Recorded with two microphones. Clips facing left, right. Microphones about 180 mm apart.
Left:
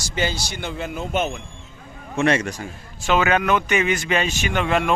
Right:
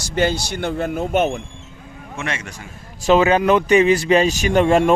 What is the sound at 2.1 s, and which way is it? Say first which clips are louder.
Speech: left 8 dB; 35° left (ahead or behind).